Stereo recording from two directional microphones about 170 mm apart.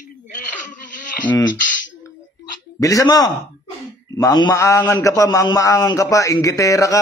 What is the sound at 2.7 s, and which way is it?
A man's voice, 20° left (ahead or behind).